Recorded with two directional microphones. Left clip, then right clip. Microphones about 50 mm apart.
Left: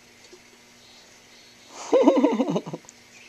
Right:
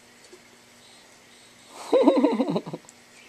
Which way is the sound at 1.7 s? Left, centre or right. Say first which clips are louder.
Left 1 dB; left.